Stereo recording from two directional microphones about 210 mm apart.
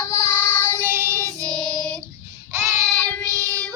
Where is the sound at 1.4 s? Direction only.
5° left (ahead or behind).